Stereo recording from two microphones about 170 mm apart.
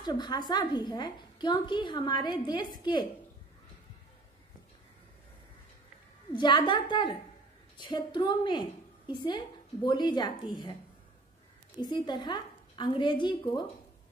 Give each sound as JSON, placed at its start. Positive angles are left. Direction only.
{"t": 0.0, "sound": "a woman's voice", "side_deg": 25}
{"t": 6.3, "sound": "a woman's voice", "side_deg": 25}
{"t": 11.8, "sound": "a woman's voice", "side_deg": 25}